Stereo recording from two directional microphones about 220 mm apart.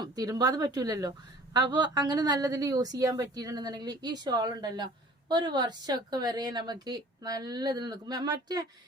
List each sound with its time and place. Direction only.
0.0 s a woman's voice: 15° right (ahead or behind)